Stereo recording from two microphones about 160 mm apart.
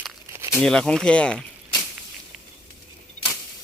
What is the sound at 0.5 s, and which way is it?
Speech, 5° left (ahead or behind).